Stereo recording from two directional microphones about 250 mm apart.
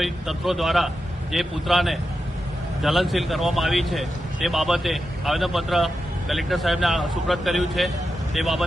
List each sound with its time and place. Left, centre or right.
0.0 s speech: centre